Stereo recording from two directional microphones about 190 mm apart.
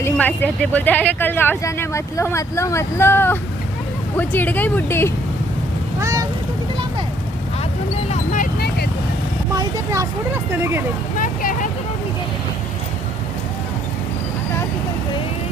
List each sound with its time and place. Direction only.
0.0 s speech: 10° left (ahead or behind)
6.0 s vehicle: 15° right (ahead or behind)
8.1 s vehicle: 45° left (ahead or behind)
9.6 s speech: 15° right (ahead or behind)
11.2 s vehicle: 45° left (ahead or behind)